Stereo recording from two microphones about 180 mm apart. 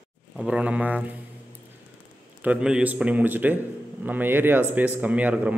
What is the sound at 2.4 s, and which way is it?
A man's voice, 5° right (ahead or behind).